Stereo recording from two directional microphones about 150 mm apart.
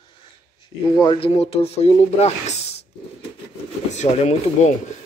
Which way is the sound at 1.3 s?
40° left (ahead or behind).